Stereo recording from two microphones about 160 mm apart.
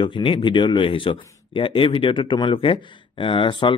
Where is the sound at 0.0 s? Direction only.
30° left (ahead or behind).